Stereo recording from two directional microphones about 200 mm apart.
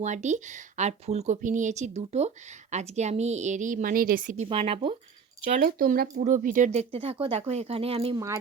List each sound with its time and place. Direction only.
0.0 s speech: 35° right (ahead or behind)
5.5 s speech: 45° right (ahead or behind); by 8.2 s 30° right (ahead or behind)